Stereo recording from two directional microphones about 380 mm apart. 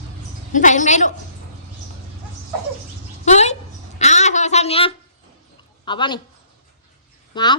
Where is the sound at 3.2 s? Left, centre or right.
Centre.